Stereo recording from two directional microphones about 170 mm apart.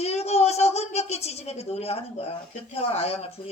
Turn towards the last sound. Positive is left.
turn(degrees=35)  # may be behind; listen again after turning